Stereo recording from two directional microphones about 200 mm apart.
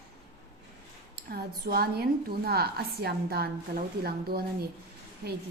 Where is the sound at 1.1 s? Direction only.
50° right (ahead or behind).